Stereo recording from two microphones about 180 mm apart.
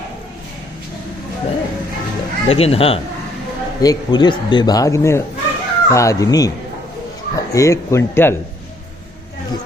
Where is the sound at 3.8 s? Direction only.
20° left (ahead or behind).